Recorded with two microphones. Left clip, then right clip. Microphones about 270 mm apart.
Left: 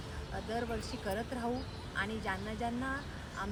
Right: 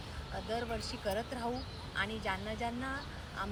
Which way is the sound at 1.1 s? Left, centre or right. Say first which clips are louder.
Right 1 dB; centre.